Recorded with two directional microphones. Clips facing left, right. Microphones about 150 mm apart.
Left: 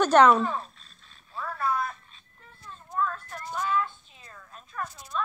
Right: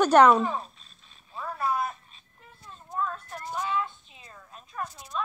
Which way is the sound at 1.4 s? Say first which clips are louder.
Even; 20° right (ahead or behind).